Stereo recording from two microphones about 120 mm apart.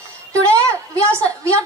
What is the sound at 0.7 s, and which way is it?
Speech, 20° right (ahead or behind).